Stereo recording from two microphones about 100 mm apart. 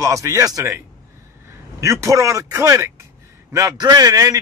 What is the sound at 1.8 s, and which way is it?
Speech, 30° right (ahead or behind).